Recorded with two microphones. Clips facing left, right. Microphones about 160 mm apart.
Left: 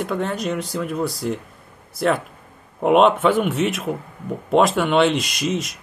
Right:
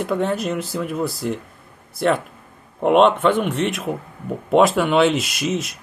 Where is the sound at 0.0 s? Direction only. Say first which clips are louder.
Right 2 dB; centre (ahead or behind).